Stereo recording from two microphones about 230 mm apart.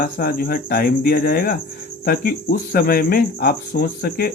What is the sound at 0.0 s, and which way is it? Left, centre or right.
Speech, left.